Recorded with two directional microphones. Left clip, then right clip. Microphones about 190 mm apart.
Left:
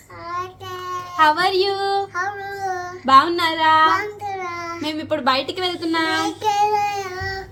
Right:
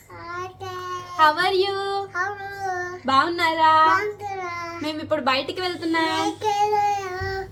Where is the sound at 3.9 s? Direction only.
Centre (ahead or behind).